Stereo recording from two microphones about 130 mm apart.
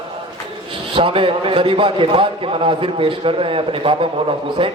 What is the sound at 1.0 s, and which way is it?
A man's voice, 40° right (ahead or behind).